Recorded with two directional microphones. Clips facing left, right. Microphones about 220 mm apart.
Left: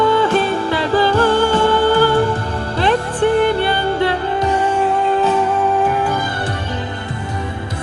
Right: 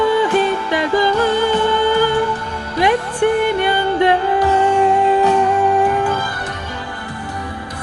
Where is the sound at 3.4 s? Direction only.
15° right (ahead or behind).